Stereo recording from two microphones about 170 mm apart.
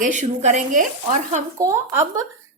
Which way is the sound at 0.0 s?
45° right (ahead or behind).